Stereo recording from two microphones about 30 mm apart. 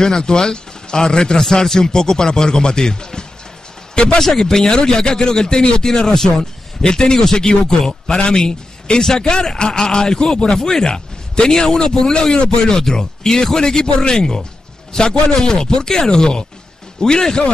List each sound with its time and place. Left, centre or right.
0.0 s speech: left
4.2 s speech: centre; by 11.4 s left
11.4 s a man's voice: centre